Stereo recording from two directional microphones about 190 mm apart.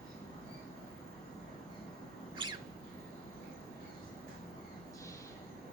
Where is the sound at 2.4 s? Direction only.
25° right (ahead or behind).